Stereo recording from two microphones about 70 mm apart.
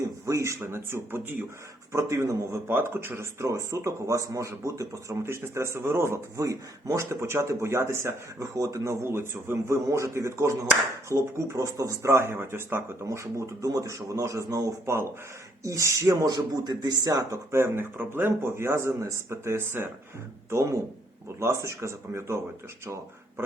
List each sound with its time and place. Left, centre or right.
0.3 s speech: right
1.9 s speech: right
2.6 s speech: right
3.4 s speech: right
12.3 s speech: right
16.2 s a man's voice: right
17.5 s speech: right
20.5 s speech: right